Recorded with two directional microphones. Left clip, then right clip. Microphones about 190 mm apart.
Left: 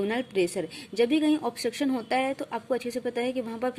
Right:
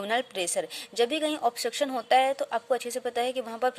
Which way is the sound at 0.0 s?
25° right (ahead or behind).